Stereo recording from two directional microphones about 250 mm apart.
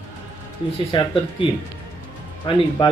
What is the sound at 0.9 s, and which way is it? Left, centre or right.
Speech, centre.